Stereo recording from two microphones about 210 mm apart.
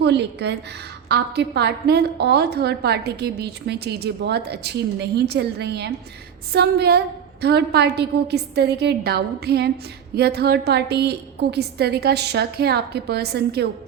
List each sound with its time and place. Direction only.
0.0 s a woman's voice: 55° right (ahead or behind)